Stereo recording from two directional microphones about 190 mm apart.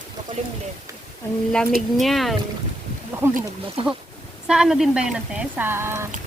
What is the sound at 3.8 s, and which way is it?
Speech, 30° right (ahead or behind).